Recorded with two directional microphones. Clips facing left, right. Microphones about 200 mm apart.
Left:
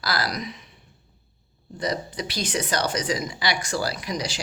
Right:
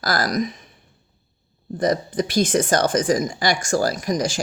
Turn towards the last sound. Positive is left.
turn(degrees=-45)  # may be behind; listen again after turning